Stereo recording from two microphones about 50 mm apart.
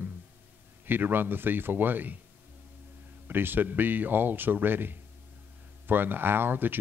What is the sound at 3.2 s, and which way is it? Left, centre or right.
Speech, right.